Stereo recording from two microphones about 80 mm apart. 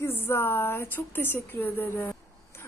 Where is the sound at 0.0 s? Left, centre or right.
Left.